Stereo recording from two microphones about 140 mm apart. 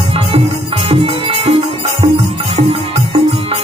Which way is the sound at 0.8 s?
40° right (ahead or behind).